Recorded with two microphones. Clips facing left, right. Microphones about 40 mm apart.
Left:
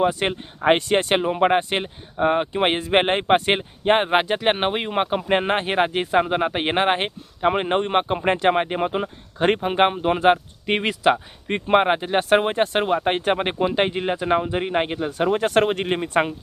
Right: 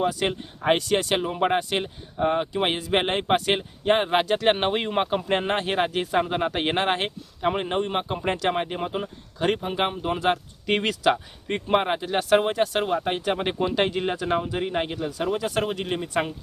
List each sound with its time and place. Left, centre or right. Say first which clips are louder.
0.0 s speech: left 4 dB; left
5.0 s speech: left 3 dB; left
10.7 s speech: left 3 dB; left